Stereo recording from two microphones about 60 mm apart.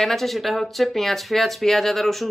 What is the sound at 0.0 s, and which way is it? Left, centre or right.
Speech, centre.